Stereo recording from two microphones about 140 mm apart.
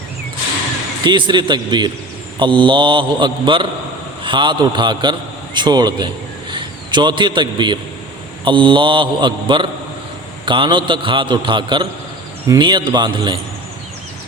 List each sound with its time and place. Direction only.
1.0 s a man's voice: 35° right (ahead or behind)